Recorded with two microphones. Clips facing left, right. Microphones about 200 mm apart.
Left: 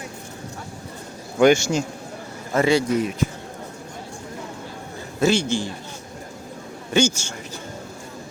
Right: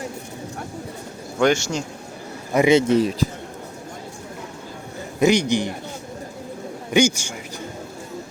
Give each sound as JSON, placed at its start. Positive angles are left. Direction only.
{"t": 1.4, "sound": "a man's voice", "side_deg": 10}
{"t": 2.5, "sound": "speech", "side_deg": -15}
{"t": 5.2, "sound": "a man's voice", "side_deg": -15}
{"t": 6.9, "sound": "a man's voice", "side_deg": -15}